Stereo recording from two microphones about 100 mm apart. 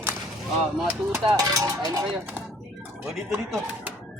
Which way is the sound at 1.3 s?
35° right (ahead or behind).